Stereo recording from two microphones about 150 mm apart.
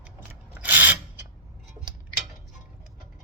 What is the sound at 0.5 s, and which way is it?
Rub, 10° right (ahead or behind).